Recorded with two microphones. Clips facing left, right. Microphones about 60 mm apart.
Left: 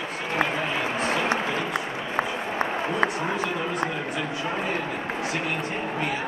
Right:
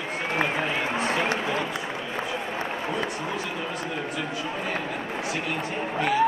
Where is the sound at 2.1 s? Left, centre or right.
Left.